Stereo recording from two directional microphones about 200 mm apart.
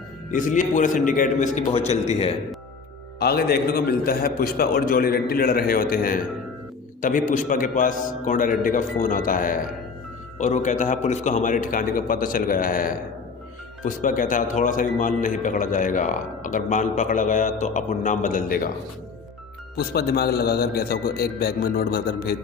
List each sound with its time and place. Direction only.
0.3 s a man's voice: 40° left (ahead or behind)
3.2 s a man's voice: 50° left (ahead or behind)
19.7 s a man's voice: 50° left (ahead or behind)